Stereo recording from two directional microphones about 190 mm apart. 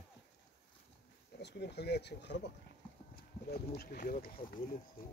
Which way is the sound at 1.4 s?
60° left (ahead or behind).